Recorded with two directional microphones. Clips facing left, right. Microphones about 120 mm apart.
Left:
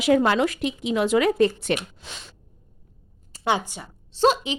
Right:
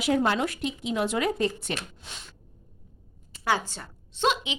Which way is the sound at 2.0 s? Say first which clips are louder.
Left 4 dB; 90° left.